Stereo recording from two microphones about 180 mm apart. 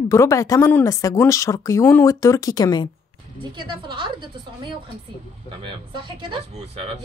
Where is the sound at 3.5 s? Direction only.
25° right (ahead or behind).